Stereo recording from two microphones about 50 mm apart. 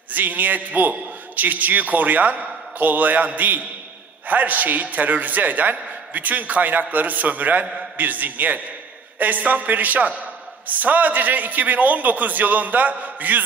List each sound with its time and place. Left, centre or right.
0.1 s a man's voice: right